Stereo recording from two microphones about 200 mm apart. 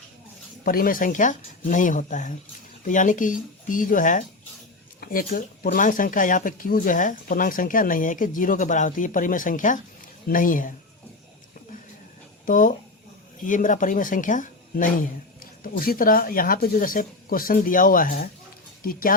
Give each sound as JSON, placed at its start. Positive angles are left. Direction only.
{"t": 0.6, "sound": "speech", "side_deg": 45}
{"t": 12.5, "sound": "speech", "side_deg": 40}